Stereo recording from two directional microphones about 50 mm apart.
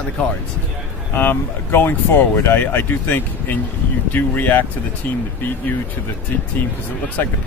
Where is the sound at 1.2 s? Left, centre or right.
Left.